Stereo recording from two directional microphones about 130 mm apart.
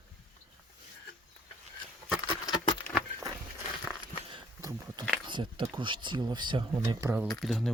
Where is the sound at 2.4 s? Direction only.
35° left (ahead or behind).